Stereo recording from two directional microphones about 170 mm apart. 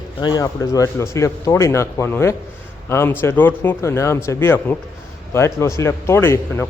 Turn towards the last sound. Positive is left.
turn(degrees=15)  # may be behind; listen again after turning